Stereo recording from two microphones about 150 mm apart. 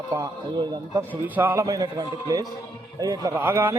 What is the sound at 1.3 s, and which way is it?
A man's voice, 15° right (ahead or behind).